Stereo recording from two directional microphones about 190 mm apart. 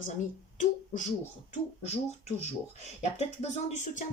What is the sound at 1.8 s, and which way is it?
Speech, 35° left (ahead or behind).